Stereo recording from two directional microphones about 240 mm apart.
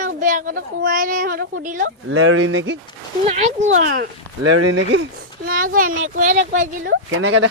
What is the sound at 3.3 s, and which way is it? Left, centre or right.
Speech, right.